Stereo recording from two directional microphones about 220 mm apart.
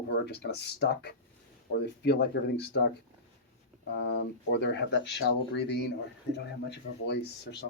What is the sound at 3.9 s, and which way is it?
Speech, 50° left (ahead or behind).